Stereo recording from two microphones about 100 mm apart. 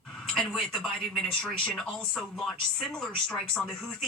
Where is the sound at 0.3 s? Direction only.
5° left (ahead or behind).